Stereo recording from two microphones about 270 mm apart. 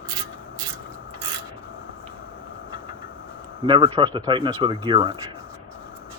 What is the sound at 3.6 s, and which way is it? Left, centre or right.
Speech, centre.